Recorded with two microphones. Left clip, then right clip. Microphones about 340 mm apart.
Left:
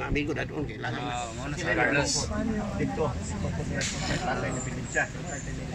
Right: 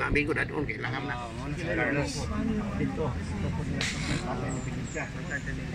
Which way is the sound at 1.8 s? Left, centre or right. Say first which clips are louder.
Left 4 dB; left.